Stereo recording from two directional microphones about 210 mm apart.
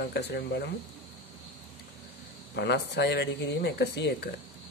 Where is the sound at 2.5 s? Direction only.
55° left (ahead or behind).